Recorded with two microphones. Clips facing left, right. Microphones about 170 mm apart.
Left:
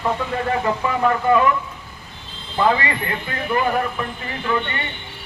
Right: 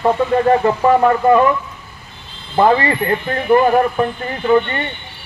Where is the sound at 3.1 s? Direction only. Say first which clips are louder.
Right 10 dB; 35° right (ahead or behind).